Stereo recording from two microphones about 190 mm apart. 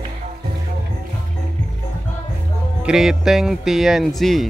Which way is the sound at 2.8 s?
5° right (ahead or behind).